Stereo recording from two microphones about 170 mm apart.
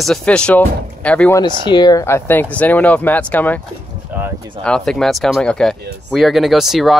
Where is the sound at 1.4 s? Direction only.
25° left (ahead or behind); by 3.6 s 10° left (ahead or behind).